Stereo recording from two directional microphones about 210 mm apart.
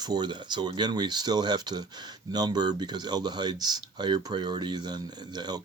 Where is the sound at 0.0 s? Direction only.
20° right (ahead or behind).